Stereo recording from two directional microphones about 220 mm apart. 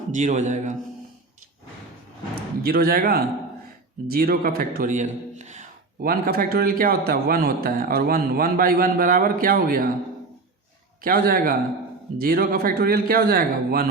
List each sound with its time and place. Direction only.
0.1 s a man's voice: 35° right (ahead or behind)
2.6 s a man's voice: 45° right (ahead or behind)
11.0 s a man's voice: 40° right (ahead or behind)